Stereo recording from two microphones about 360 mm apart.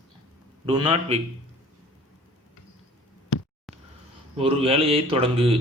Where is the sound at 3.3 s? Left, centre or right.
Left.